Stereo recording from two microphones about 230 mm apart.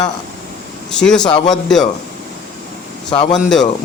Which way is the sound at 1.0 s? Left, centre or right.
Centre.